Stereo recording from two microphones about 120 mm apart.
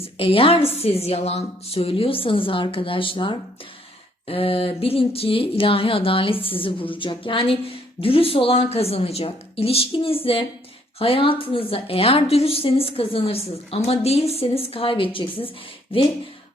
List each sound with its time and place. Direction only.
0.0 s a woman's voice: 55° left (ahead or behind)